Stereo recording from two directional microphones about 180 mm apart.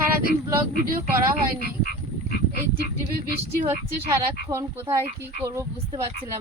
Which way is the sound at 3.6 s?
15° right (ahead or behind).